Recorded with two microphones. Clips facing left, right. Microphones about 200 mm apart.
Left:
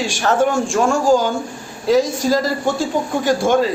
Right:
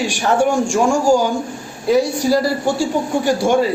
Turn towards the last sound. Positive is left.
turn(degrees=-10)  # may be behind; listen again after turning